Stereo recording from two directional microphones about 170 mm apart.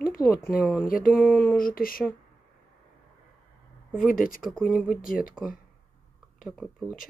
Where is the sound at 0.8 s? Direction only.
55° left (ahead or behind).